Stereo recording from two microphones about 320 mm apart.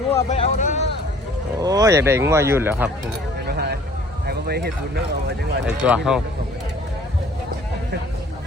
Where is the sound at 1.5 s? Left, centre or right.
Centre.